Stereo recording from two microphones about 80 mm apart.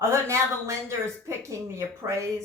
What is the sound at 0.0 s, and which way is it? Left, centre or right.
Speech, right.